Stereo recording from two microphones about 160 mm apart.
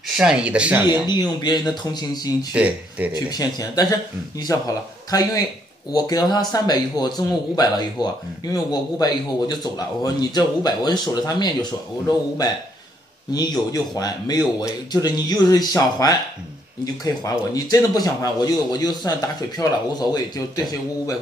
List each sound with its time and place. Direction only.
0.1 s speech: 5° right (ahead or behind)
1.0 s speech: 25° left (ahead or behind)
2.5 s speech: 10° right (ahead or behind)
3.1 s speech: 25° left (ahead or behind)
13.3 s speech: 25° left (ahead or behind)